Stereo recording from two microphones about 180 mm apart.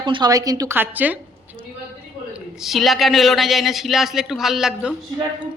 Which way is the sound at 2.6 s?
Centre (ahead or behind).